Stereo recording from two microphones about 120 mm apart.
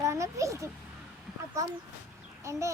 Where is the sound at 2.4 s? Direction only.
25° right (ahead or behind).